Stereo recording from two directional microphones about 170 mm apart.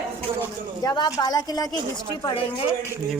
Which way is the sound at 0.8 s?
25° left (ahead or behind).